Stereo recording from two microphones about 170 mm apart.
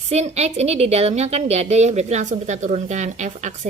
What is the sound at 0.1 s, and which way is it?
Speech, 40° right (ahead or behind).